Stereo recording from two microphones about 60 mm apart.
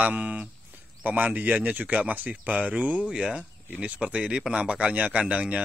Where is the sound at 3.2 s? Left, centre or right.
Centre.